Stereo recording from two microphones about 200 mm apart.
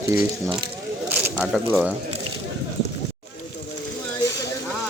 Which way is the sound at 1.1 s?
5° right (ahead or behind).